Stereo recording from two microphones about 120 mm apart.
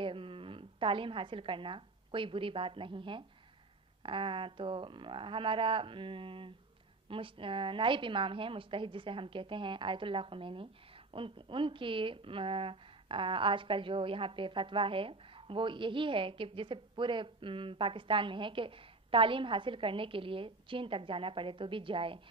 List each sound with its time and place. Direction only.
0.0 s a woman's voice: 45° right (ahead or behind)